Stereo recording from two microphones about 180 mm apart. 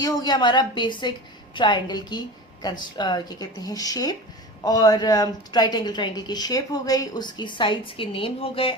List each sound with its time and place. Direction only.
0.0 s speech: 20° left (ahead or behind)